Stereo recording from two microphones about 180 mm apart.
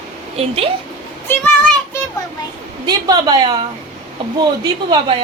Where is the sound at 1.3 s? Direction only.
10° left (ahead or behind).